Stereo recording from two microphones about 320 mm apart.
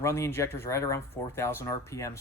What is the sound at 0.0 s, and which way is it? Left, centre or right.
Speech, centre.